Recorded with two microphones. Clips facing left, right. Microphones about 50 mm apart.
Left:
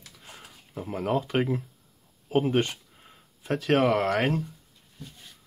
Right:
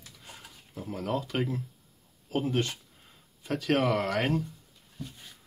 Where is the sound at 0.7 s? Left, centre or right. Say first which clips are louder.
Left 4 dB; left.